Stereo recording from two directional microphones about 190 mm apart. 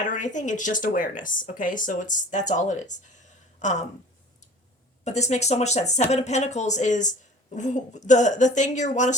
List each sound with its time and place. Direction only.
0.0 s speech: 40° left (ahead or behind)
5.0 s speech: 35° left (ahead or behind)